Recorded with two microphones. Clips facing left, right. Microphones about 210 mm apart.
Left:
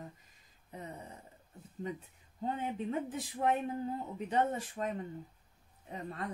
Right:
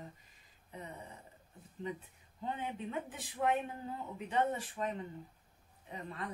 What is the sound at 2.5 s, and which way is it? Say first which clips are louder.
Speech: left 3 dB; 40° left (ahead or behind).